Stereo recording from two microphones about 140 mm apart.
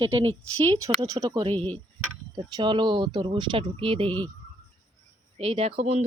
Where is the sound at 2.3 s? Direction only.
30° right (ahead or behind).